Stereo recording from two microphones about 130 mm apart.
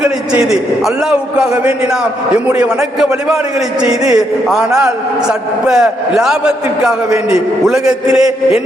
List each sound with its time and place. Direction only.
0.9 s a man's voice: 10° right (ahead or behind)